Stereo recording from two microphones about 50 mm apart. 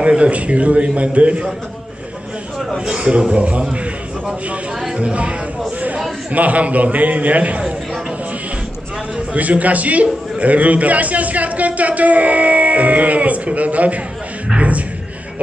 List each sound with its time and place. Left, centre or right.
0.0 s a man's voice: right
2.8 s a man's voice: centre
4.9 s a man's voice: right
6.3 s a man's voice: right
9.3 s a man's voice: right